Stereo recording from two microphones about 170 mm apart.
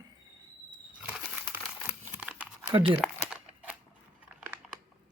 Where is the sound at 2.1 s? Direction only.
5° right (ahead or behind).